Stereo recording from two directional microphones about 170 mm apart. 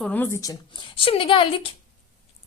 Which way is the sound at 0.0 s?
10° left (ahead or behind).